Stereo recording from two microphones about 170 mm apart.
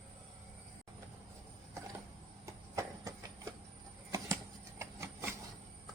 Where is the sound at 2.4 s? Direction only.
20° right (ahead or behind).